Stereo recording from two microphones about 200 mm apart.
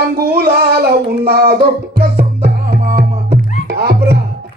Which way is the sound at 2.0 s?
50° right (ahead or behind).